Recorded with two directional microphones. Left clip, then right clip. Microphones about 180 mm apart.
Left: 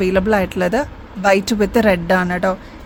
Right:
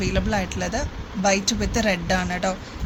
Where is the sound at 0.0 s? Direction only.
60° left (ahead or behind).